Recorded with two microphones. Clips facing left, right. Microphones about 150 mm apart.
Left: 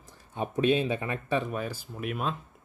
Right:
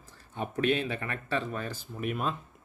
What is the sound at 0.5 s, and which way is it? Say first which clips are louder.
Speech: left 3 dB; 20° left (ahead or behind).